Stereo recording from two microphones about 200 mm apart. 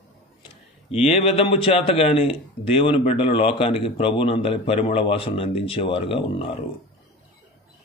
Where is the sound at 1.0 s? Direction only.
30° left (ahead or behind).